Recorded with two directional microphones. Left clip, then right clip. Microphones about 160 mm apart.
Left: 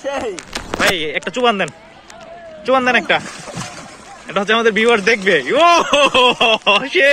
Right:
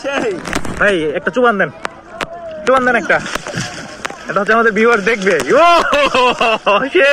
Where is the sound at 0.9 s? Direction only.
25° left (ahead or behind).